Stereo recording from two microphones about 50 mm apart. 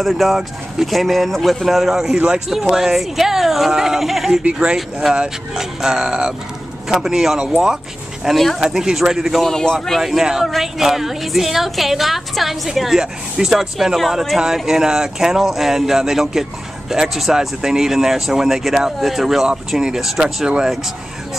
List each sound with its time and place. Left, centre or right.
0.0 s a woman's voice: centre
2.1 s speech: centre
2.5 s a woman's voice: centre
4.4 s speech: right
5.5 s speech: centre
9.4 s a man's voice: centre
10.0 s a woman's voice: centre
20.4 s speech: centre